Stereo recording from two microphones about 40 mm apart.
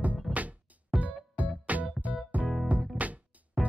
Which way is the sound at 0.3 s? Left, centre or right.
Right.